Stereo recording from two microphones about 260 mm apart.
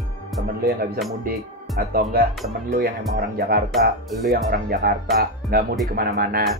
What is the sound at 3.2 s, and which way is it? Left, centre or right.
Speech, right.